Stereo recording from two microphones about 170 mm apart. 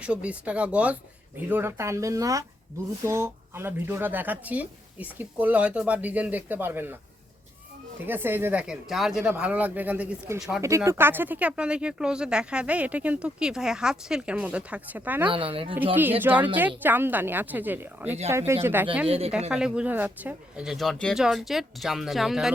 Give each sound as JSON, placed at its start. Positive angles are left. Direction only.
{"t": 0.0, "sound": "speech", "side_deg": -5}
{"t": 8.0, "sound": "speech", "side_deg": -10}
{"t": 15.3, "sound": "speech", "side_deg": -30}
{"t": 16.2, "sound": "speech", "side_deg": -10}
{"t": 19.0, "sound": "speech", "side_deg": -35}
{"t": 19.5, "sound": "speech", "side_deg": -5}